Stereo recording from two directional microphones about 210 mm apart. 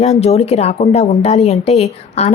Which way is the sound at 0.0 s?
30° left (ahead or behind).